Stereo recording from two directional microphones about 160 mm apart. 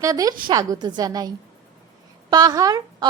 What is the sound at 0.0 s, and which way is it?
A woman's voice, 20° right (ahead or behind).